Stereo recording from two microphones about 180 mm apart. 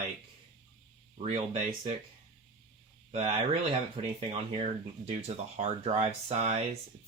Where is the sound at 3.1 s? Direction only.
30° right (ahead or behind).